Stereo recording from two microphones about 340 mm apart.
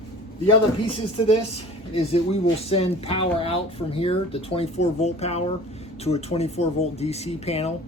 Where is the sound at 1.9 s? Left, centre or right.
Centre.